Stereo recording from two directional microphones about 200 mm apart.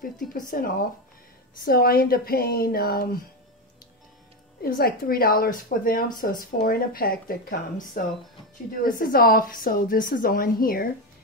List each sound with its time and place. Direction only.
0.5 s a woman's voice: 45° left (ahead or behind)
4.6 s a woman's voice: 45° left (ahead or behind)